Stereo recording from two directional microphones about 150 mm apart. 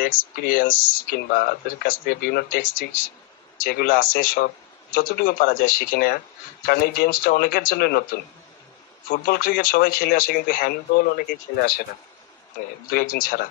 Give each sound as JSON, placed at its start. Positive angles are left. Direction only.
{"t": 0.0, "sound": "speech", "side_deg": 75}
{"t": 3.6, "sound": "speech", "side_deg": 75}
{"t": 6.6, "sound": "speech", "side_deg": 90}
{"t": 9.1, "sound": "speech", "side_deg": 75}
{"t": 12.9, "sound": "speech", "side_deg": 65}